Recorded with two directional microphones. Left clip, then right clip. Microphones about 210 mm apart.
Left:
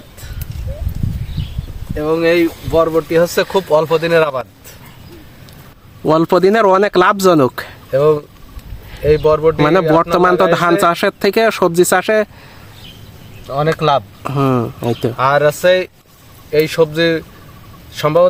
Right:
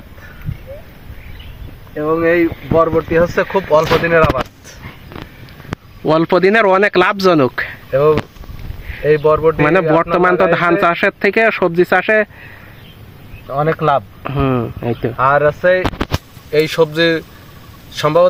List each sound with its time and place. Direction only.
2.0 s speech: 20° left (ahead or behind)
6.1 s speech: 10° left (ahead or behind)
13.5 s speech: 15° left (ahead or behind)